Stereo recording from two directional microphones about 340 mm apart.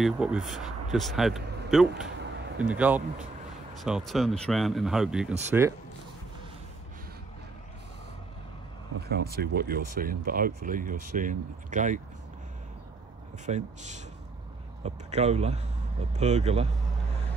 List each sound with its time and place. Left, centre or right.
0.0 s speech: centre
9.0 s speech: right
13.5 s speech: right